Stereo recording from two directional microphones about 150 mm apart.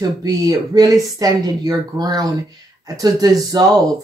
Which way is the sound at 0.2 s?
25° right (ahead or behind).